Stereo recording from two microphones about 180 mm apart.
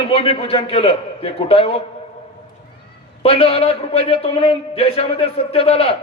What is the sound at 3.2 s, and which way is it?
A man's voice, 35° left (ahead or behind).